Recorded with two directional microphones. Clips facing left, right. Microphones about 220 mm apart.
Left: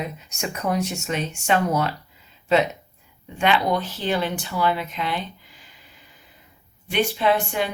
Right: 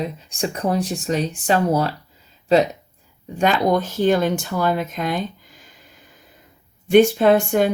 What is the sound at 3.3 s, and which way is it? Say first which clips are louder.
Speech: right 3 dB; 45° right (ahead or behind).